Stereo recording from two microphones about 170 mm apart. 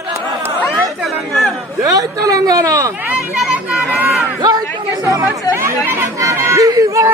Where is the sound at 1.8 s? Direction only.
20° right (ahead or behind).